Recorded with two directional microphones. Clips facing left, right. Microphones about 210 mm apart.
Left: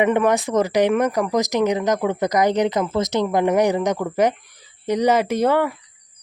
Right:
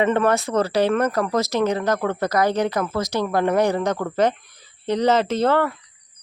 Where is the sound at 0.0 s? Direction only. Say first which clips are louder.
Left 1 dB; 15° left (ahead or behind).